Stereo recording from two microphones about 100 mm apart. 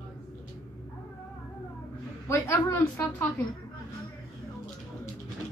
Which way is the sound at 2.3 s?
25° left (ahead or behind).